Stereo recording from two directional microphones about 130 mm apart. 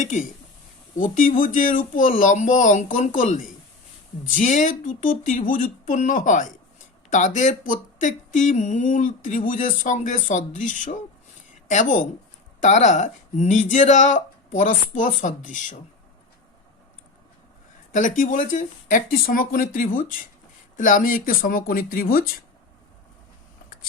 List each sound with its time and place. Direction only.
0.0 s speech: 70° left (ahead or behind)
0.9 s speech: 90° left
7.1 s speech: 70° left (ahead or behind)
17.9 s speech: 85° left